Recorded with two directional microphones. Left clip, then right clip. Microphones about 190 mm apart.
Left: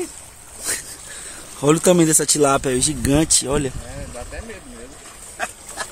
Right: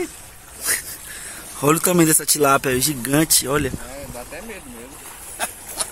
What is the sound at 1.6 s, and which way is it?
Speech, 5° left (ahead or behind).